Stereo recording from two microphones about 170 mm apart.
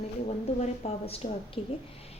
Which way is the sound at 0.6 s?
35° left (ahead or behind).